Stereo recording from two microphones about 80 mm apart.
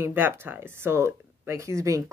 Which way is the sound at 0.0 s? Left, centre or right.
Right.